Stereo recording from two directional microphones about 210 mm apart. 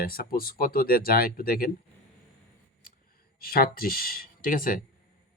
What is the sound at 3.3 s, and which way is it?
Speech, 45° left (ahead or behind).